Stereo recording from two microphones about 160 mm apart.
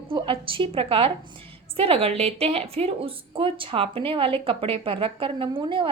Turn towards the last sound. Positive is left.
turn(degrees=-30)  # may be behind; listen again after turning